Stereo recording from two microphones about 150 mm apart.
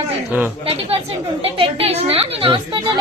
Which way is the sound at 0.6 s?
40° right (ahead or behind).